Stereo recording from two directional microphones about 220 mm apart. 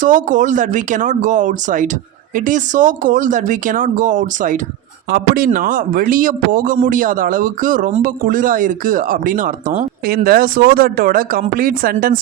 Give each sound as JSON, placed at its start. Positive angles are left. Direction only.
{"t": 0.0, "sound": "a man's voice", "side_deg": -35}